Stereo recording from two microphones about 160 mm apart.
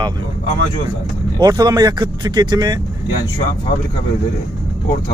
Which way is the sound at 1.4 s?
20° right (ahead or behind).